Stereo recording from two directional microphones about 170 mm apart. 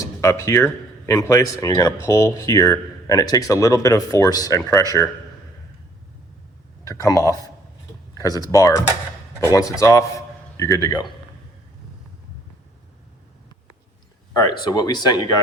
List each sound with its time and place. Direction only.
0.0 s speech: 15° left (ahead or behind)
6.8 s a man's voice: 20° left (ahead or behind)
14.6 s speech: 25° left (ahead or behind)